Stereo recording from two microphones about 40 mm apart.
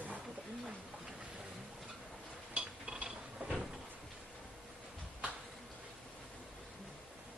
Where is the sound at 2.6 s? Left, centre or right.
Right.